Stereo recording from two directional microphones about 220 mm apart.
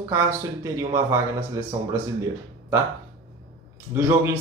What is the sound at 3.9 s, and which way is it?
Speech, 10° right (ahead or behind).